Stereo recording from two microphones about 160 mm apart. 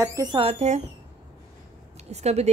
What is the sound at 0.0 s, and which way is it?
Speech, 20° right (ahead or behind).